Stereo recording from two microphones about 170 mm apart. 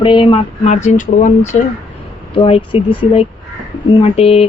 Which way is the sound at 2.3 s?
30° left (ahead or behind).